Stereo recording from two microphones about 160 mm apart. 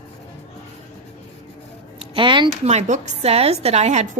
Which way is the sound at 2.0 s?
35° right (ahead or behind).